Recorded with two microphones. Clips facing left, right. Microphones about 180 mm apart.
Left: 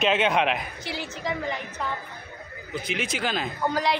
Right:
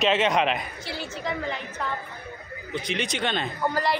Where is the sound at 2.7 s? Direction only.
5° left (ahead or behind).